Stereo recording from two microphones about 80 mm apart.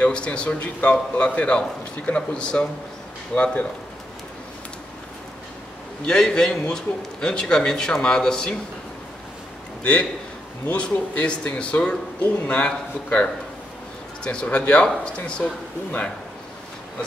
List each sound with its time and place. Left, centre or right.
0.0 s a man's voice: centre
6.0 s a man's voice: centre
10.7 s a man's voice: centre